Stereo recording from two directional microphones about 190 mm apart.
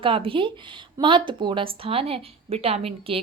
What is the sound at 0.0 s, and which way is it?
A woman's voice, 30° right (ahead or behind).